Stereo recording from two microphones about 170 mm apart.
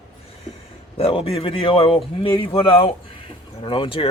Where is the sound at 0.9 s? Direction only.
35° left (ahead or behind).